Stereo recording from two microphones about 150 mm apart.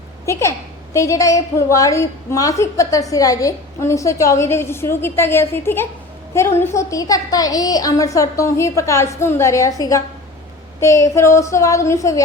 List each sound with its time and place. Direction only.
0.3 s a woman's voice: 20° left (ahead or behind)